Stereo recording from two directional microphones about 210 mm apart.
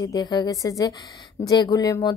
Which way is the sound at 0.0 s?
20° left (ahead or behind).